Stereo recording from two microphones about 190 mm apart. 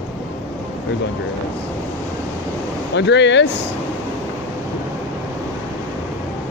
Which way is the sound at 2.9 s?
70° left (ahead or behind).